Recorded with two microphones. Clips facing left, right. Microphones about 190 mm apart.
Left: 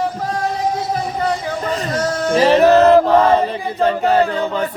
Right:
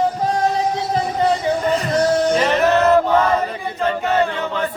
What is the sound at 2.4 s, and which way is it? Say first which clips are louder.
Choir: left 5 dB; 35° left (ahead or behind).